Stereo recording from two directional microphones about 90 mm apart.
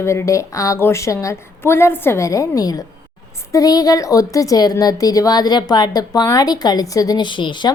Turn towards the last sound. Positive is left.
turn(degrees=60)  # may be behind; listen again after turning